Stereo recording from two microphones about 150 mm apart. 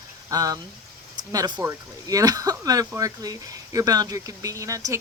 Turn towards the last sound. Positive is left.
turn(degrees=-20)  # may be behind; listen again after turning